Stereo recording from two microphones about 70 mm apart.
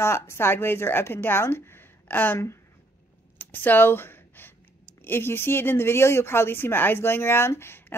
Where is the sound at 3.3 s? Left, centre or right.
Left.